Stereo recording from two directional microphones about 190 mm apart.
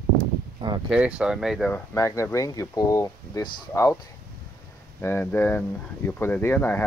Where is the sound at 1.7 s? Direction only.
15° left (ahead or behind).